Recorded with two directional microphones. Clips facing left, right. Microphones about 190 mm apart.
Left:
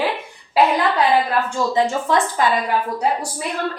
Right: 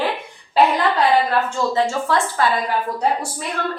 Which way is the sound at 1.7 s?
15° left (ahead or behind).